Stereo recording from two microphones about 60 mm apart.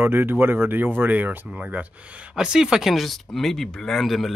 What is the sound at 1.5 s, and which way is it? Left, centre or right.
Speech, centre.